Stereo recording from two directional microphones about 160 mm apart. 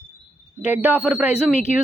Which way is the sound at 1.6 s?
50° left (ahead or behind).